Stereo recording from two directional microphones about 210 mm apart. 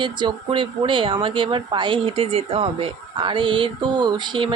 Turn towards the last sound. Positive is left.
turn(degrees=-20)  # may be behind; listen again after turning